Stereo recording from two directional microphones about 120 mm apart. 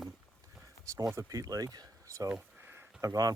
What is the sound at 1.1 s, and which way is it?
Speech, 30° right (ahead or behind).